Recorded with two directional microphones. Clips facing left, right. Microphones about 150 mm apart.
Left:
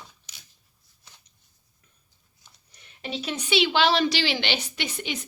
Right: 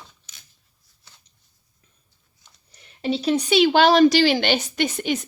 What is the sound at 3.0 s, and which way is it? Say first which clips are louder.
A woman's voice: right 10 dB; 35° right (ahead or behind).